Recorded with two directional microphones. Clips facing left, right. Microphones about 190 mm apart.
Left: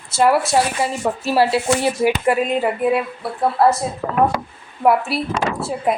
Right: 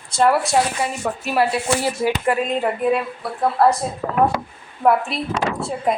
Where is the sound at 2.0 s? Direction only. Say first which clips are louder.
Left 2 dB; 10° left (ahead or behind).